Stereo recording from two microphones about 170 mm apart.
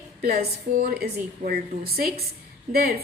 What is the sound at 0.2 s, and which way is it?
Speech, 60° right (ahead or behind).